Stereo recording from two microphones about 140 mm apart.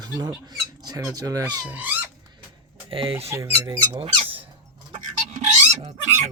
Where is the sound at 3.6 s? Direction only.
35° right (ahead or behind).